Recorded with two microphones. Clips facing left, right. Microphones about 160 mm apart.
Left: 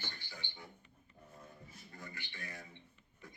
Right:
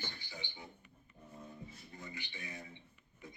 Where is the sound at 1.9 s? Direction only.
20° right (ahead or behind).